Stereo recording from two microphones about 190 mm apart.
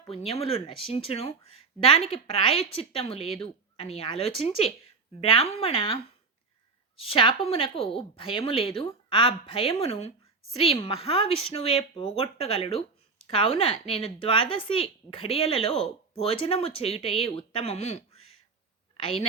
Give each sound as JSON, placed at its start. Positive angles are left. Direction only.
{"t": 0.0, "sound": "speech", "side_deg": 30}